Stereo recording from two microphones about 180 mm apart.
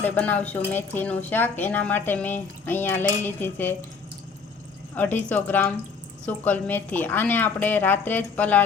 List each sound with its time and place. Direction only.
0.0 s speech: 10° left (ahead or behind)
4.9 s speech: 10° left (ahead or behind)